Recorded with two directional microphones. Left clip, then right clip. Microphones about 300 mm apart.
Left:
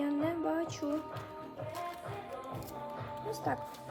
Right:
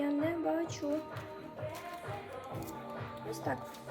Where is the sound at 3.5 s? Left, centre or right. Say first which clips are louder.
Left 2 dB; centre.